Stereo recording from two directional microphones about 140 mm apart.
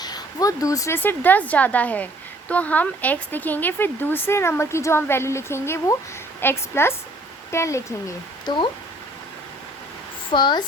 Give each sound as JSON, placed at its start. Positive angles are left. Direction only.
{"t": 0.0, "sound": "speech", "side_deg": 25}
{"t": 10.3, "sound": "speech", "side_deg": 30}